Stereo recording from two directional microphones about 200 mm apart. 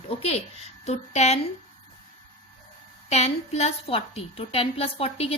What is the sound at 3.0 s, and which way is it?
A woman's voice, 35° left (ahead or behind).